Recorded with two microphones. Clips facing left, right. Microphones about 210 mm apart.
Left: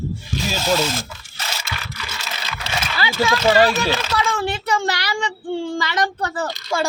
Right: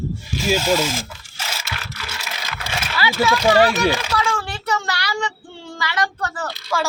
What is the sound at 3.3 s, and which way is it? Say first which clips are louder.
Speech: left 1 dB; 15° right (ahead or behind).